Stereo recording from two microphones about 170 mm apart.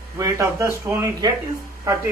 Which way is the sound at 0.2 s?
15° right (ahead or behind).